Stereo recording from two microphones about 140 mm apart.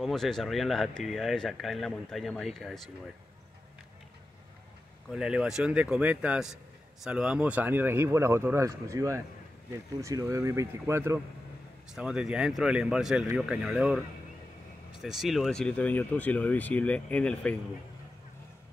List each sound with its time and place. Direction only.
0.0 s speech: 5° left (ahead or behind)
5.1 s a man's voice: 5° right (ahead or behind)
11.9 s speech: 5° right (ahead or behind)